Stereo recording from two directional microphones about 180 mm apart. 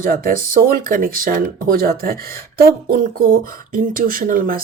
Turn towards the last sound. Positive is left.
turn(degrees=-50)  # may be behind; listen again after turning